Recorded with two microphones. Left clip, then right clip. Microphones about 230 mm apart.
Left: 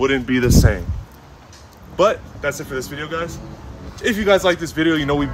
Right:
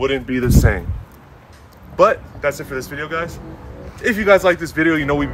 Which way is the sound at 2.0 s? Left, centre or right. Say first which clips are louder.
Right 3 dB; centre.